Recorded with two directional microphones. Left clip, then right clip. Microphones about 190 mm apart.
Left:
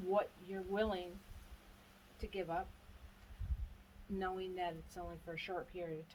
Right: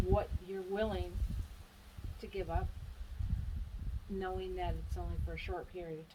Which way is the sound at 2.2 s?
15° left (ahead or behind).